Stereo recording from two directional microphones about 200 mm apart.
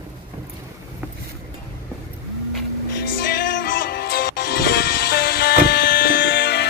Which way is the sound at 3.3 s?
45° left (ahead or behind).